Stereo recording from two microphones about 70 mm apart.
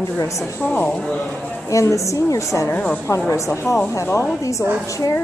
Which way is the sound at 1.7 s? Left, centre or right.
Left.